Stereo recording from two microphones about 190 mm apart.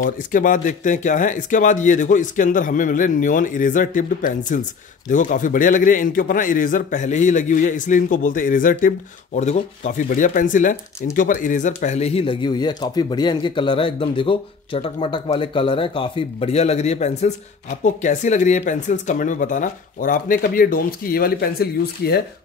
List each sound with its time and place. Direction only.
0.0 s a man's voice: 45° left (ahead or behind)